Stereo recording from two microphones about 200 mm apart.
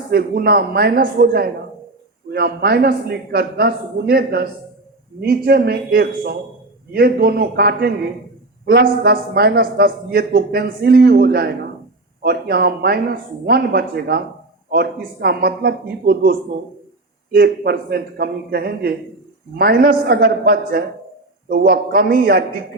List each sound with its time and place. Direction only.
0.1 s a man's voice: 50° right (ahead or behind)